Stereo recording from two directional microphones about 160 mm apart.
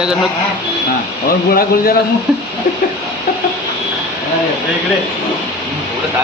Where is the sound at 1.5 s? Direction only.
65° left (ahead or behind).